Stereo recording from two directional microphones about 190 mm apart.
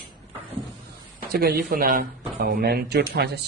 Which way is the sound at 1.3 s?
55° right (ahead or behind).